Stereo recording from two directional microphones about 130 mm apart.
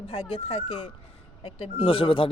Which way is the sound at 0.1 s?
45° left (ahead or behind).